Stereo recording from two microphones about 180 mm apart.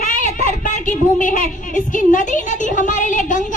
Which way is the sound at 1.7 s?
45° left (ahead or behind).